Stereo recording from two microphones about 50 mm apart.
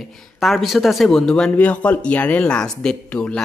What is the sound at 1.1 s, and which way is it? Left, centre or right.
Speech, centre.